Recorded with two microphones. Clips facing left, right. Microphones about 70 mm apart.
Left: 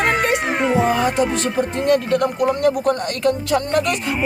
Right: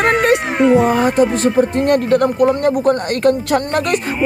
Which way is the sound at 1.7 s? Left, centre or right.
Right.